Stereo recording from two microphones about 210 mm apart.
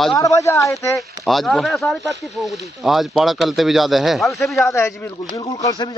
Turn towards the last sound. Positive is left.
turn(degrees=15)  # may be behind; listen again after turning